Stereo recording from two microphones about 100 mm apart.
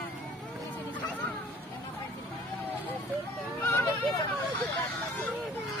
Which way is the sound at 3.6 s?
20° left (ahead or behind).